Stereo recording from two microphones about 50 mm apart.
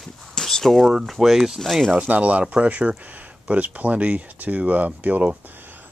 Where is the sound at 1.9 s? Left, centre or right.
Right.